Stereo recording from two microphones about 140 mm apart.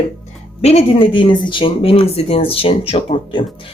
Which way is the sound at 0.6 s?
45° left (ahead or behind).